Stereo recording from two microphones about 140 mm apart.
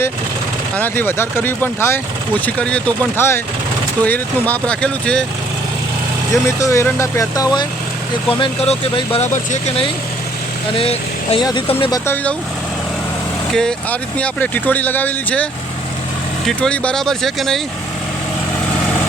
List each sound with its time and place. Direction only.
0.8 s speech: 15° left (ahead or behind)
6.3 s speech: 20° left (ahead or behind)
9.2 s speech: 60° left (ahead or behind)
10.8 s speech: 40° left (ahead or behind)
11.9 s speech: 15° left (ahead or behind)
13.5 s speech: 5° left (ahead or behind)
16.5 s speech: 5° left (ahead or behind)